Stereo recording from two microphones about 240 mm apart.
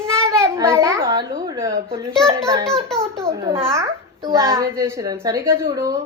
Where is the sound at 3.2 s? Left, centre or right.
Centre.